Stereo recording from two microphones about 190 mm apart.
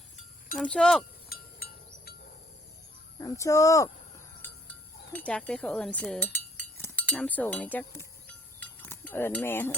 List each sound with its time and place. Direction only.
0.5 s speech: 5° left (ahead or behind)
3.2 s speech: 15° left (ahead or behind)
5.1 s speech: 5° left (ahead or behind)